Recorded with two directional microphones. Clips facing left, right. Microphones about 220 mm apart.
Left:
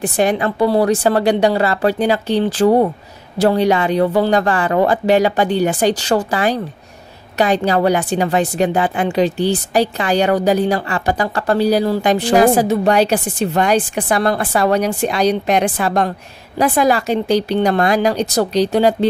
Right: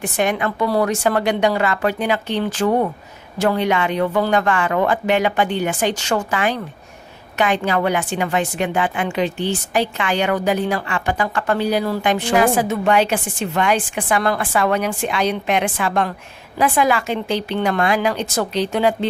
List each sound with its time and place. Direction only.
0.0 s a woman's voice: 35° left (ahead or behind)